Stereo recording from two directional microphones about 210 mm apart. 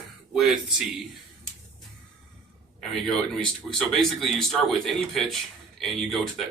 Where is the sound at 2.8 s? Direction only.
Centre (ahead or behind).